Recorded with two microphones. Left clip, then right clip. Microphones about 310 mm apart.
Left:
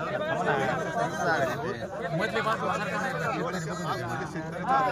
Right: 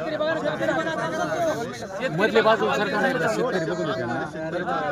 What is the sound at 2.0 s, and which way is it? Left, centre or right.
Speech, right.